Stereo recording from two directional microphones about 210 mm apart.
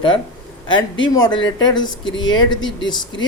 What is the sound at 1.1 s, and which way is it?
Speech, 20° left (ahead or behind).